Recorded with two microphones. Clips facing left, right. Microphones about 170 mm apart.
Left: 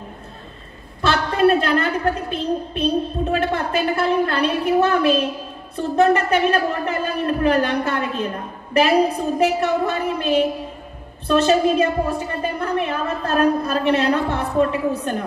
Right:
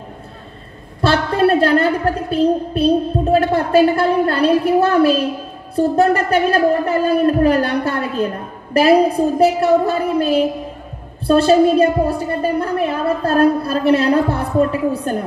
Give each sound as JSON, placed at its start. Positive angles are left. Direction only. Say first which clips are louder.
{"t": 1.0, "sound": "a woman's voice", "louder": "right 2 dB", "side_deg": -35}